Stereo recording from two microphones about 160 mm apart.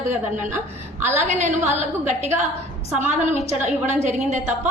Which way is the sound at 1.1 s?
45° right (ahead or behind).